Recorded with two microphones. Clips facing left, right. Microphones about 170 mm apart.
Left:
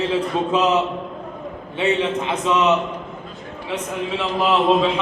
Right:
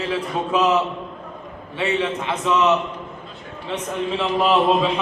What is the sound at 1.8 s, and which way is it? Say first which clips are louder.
Speech: left 2 dB; 20° left (ahead or behind).